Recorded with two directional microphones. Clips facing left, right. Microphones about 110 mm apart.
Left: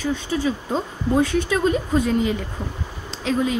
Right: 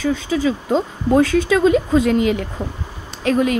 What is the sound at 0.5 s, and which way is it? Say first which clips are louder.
Speech: right 5 dB; 90° right.